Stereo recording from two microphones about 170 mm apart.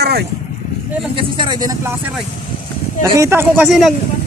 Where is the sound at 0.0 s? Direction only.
70° right (ahead or behind).